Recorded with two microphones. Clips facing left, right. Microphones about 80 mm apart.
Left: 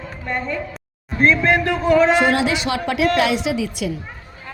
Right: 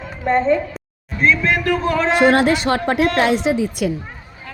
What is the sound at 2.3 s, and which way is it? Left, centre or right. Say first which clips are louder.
A woman's voice: right 4 dB; right.